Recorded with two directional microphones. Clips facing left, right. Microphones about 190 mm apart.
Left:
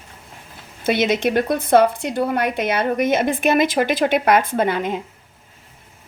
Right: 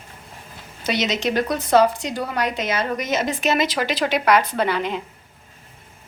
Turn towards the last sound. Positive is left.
turn(degrees=50)  # may be behind; listen again after turning